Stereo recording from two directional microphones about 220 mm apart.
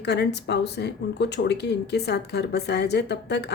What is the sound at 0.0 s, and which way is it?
Speech, 50° left (ahead or behind).